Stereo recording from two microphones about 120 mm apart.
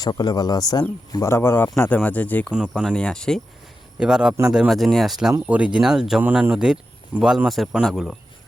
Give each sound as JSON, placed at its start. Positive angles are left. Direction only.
{"t": 0.0, "sound": "speech", "side_deg": 35}
{"t": 2.5, "sound": "speech", "side_deg": -5}
{"t": 2.8, "sound": "speech", "side_deg": 10}
{"t": 4.0, "sound": "speech", "side_deg": -5}
{"t": 4.7, "sound": "speech", "side_deg": 0}